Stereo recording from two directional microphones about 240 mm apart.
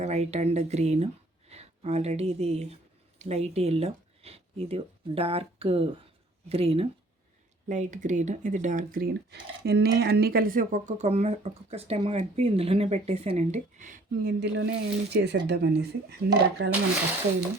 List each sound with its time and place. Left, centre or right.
0.0 s speech: right